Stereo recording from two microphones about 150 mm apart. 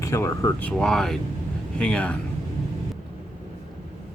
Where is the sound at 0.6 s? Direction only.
5° left (ahead or behind).